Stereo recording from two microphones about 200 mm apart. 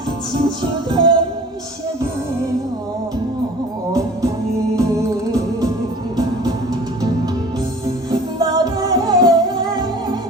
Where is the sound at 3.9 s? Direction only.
15° right (ahead or behind).